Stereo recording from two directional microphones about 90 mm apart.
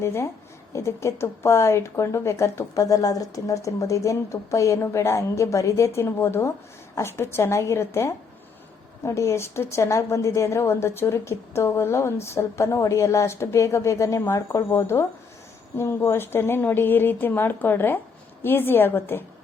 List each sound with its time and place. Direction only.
0.0 s a woman's voice: 30° left (ahead or behind)